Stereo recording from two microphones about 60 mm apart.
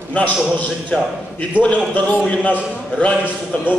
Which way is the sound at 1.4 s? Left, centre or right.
Left.